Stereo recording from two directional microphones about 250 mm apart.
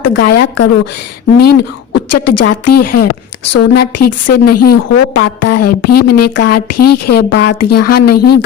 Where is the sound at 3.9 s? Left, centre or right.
Left.